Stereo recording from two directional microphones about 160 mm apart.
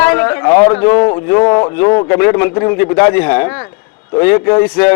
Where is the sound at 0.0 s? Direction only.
15° left (ahead or behind).